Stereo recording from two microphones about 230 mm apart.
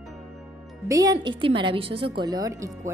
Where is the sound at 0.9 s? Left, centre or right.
Centre.